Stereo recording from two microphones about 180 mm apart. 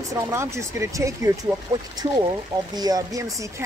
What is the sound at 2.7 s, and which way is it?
Speech, 20° right (ahead or behind).